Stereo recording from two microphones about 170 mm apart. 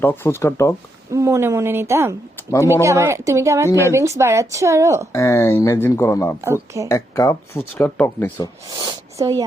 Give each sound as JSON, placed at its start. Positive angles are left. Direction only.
{"t": 0.0, "sound": "speech", "side_deg": 15}
{"t": 1.1, "sound": "a woman's voice", "side_deg": -20}
{"t": 3.7, "sound": "speech", "side_deg": 15}
{"t": 3.9, "sound": "a woman's voice", "side_deg": -15}
{"t": 5.1, "sound": "speech", "side_deg": 15}
{"t": 6.4, "sound": "a woman's voice", "side_deg": -15}
{"t": 6.8, "sound": "speech", "side_deg": 20}
{"t": 8.8, "sound": "speech", "side_deg": -20}